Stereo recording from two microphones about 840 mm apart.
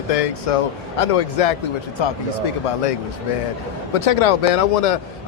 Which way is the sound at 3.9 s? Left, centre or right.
Left.